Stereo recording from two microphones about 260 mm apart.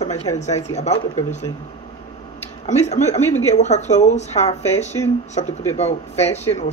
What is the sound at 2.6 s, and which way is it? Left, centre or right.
Speech, left.